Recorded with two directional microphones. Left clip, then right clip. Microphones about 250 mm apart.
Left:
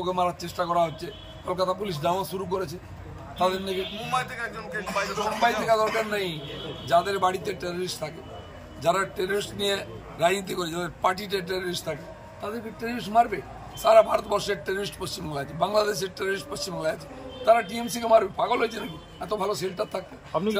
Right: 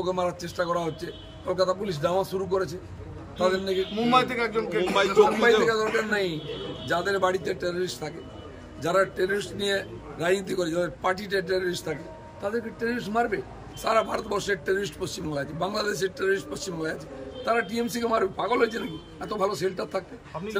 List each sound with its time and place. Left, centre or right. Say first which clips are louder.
0.0 s a man's voice: left 1 dB; centre
4.1 s a man's voice: right 7 dB; right
5.7 s a man's voice: left 1 dB; centre
12.8 s a man's voice: left 5 dB; centre
17.5 s a man's voice: left 5 dB; centre